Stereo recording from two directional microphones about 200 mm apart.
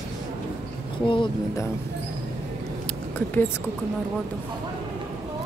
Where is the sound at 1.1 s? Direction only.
25° left (ahead or behind).